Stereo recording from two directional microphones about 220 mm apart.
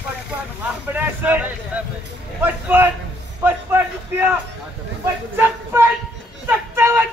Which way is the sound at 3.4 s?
10° right (ahead or behind).